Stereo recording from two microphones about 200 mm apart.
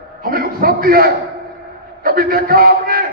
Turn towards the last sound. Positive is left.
turn(degrees=-45)  # may be behind; listen again after turning